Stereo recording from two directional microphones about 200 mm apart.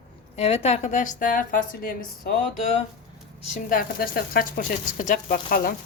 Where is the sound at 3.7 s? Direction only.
45° left (ahead or behind).